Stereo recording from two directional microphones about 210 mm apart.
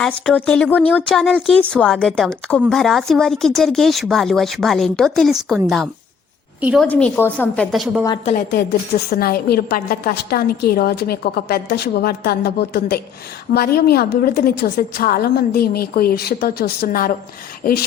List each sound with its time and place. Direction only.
0.0 s a woman's voice: 5° left (ahead or behind)
6.8 s speech: 5° left (ahead or behind)
9.0 s a woman's voice: 45° left (ahead or behind)